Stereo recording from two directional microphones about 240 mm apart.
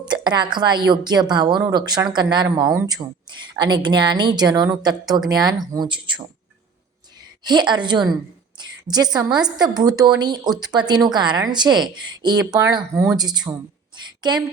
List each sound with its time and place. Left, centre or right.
0.0 s a woman's voice: centre
7.4 s a woman's voice: centre